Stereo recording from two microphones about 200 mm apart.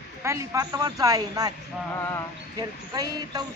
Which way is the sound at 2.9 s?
20° right (ahead or behind).